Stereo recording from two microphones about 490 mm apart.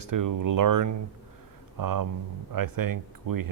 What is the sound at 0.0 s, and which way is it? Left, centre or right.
Speech, right.